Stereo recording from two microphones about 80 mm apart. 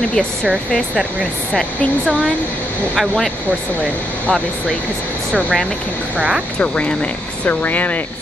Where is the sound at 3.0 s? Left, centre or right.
Centre.